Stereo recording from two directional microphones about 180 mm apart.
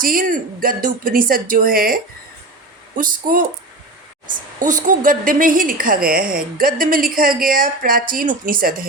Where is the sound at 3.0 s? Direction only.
50° right (ahead or behind).